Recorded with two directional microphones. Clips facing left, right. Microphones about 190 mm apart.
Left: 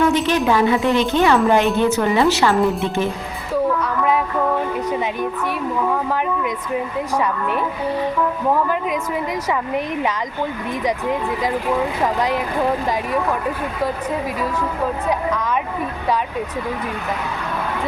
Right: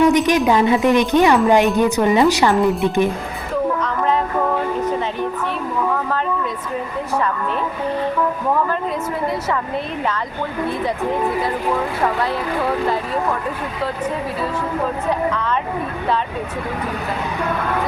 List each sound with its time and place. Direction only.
0.0 s a woman's voice: 15° right (ahead or behind)
12.0 s speech: 15° left (ahead or behind)